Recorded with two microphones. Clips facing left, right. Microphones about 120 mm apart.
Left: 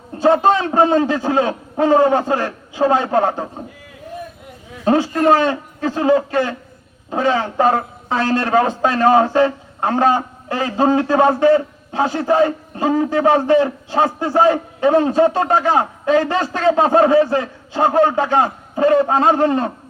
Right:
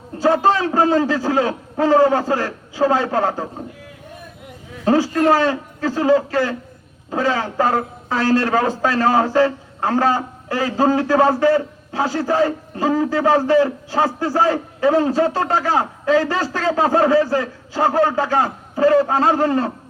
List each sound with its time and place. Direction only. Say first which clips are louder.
0.2 s a man's voice: left 2 dB; 20° left (ahead or behind)
4.9 s a man's voice: left 1 dB; 20° left (ahead or behind)